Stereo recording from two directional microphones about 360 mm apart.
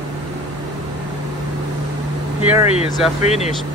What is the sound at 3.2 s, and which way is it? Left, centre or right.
Speech, centre.